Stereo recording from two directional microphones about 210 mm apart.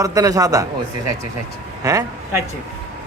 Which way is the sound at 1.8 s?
15° right (ahead or behind).